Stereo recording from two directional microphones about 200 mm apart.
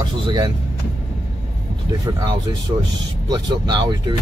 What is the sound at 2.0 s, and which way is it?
Speech, 20° right (ahead or behind).